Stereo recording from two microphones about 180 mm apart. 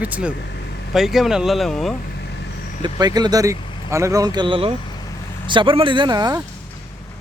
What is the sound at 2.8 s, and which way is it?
Speech, 20° right (ahead or behind).